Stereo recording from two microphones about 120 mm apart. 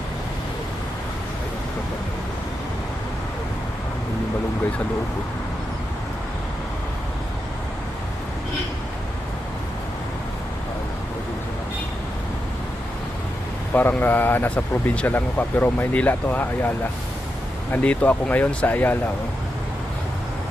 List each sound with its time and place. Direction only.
13.7 s speech: 15° left (ahead or behind)